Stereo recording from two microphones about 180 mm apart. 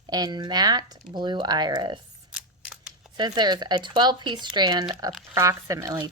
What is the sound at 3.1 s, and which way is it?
Speech, 25° right (ahead or behind).